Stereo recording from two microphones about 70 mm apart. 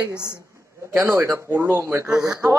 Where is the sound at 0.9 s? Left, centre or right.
Right.